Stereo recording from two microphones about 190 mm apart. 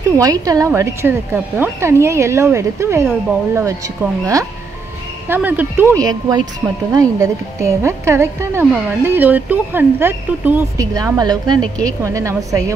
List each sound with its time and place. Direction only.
0.2 s speech: 20° right (ahead or behind)